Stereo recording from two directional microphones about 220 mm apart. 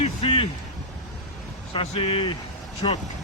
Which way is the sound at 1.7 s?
25° left (ahead or behind).